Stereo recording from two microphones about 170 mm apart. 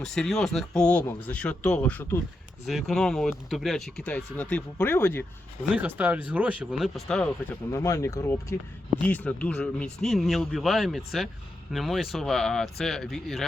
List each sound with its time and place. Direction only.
0.0 s speech: 5° left (ahead or behind)
2.6 s speech: centre (ahead or behind)
5.7 s speech: 10° right (ahead or behind)
7.7 s speech: 20° left (ahead or behind); by 13.4 s centre (ahead or behind)